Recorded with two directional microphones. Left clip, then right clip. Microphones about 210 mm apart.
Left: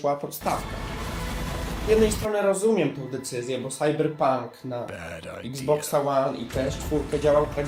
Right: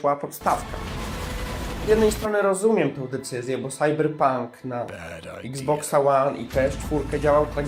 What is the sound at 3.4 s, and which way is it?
Speech, 25° right (ahead or behind).